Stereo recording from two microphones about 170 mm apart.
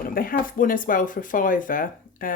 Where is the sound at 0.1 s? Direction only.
55° left (ahead or behind).